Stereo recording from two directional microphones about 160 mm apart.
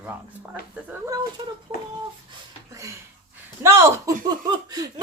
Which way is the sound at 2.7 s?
20° right (ahead or behind).